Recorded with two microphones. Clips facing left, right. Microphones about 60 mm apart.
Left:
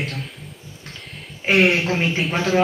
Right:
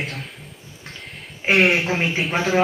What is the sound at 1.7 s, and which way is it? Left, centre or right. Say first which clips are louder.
Speech: even; centre.